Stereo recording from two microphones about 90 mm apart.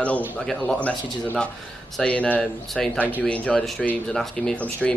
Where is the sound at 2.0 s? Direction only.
15° left (ahead or behind).